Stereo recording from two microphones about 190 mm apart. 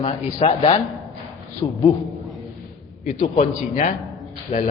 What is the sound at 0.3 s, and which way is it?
A man's voice, 30° left (ahead or behind).